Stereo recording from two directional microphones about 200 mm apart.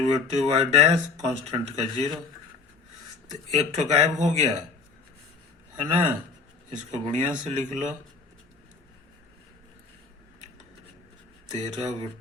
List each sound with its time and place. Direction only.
0.0 s speech: 30° right (ahead or behind)
3.5 s speech: 35° right (ahead or behind)
6.7 s speech: 35° right (ahead or behind)
11.5 s speech: 35° right (ahead or behind)